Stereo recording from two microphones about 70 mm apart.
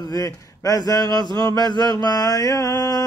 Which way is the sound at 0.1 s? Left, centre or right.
Left.